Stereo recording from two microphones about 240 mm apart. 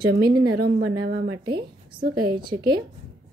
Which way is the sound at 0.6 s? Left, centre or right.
Right.